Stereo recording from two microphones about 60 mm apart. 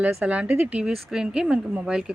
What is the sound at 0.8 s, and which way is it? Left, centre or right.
Speech, centre.